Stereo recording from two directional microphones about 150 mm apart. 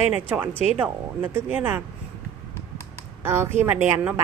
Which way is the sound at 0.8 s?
15° right (ahead or behind).